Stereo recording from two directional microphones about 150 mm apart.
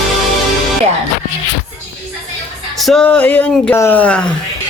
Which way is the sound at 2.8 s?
5° left (ahead or behind).